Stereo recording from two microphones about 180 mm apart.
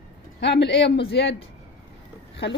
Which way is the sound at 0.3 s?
70° left (ahead or behind).